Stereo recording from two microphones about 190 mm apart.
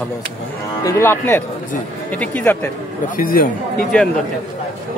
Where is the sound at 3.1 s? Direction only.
45° left (ahead or behind).